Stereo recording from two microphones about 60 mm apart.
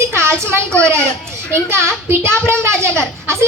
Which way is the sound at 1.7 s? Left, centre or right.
Right.